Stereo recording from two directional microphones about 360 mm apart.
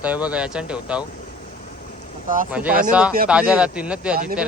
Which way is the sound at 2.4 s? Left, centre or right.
Centre.